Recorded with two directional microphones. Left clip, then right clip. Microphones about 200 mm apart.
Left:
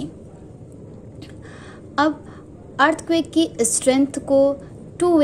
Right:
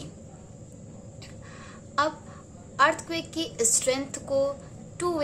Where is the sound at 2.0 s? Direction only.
25° left (ahead or behind).